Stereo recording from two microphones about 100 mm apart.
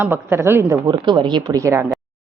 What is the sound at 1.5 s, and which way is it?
Speech, 30° right (ahead or behind).